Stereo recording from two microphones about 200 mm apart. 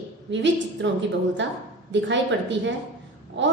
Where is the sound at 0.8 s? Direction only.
60° right (ahead or behind).